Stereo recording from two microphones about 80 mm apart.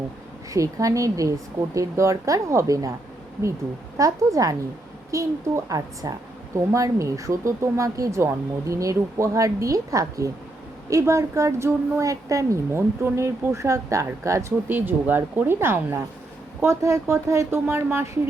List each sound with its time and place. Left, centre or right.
0.5 s a woman's voice: right
3.9 s a woman's voice: right
14.7 s a woman's voice: right